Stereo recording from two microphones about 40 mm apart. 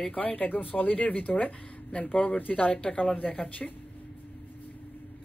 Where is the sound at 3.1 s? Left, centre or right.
Left.